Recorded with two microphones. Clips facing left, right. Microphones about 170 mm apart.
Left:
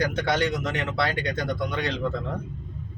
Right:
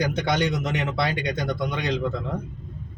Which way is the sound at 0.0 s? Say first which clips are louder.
Right 1 dB; 15° right (ahead or behind).